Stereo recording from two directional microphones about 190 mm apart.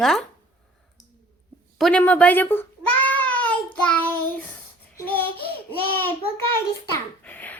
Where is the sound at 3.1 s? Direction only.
10° left (ahead or behind).